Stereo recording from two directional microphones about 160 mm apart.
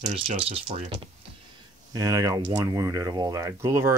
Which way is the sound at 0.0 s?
45° right (ahead or behind).